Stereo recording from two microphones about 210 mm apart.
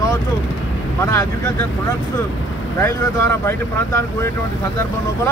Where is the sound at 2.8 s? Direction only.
15° left (ahead or behind).